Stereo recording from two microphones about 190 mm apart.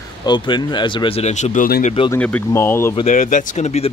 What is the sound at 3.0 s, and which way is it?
Speech, 45° left (ahead or behind).